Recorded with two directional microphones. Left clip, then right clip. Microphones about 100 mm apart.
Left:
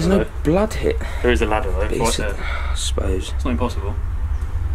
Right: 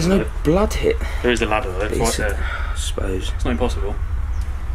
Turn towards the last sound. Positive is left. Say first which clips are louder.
# right 1 dB
turn(degrees=10)  # may be behind; listen again after turning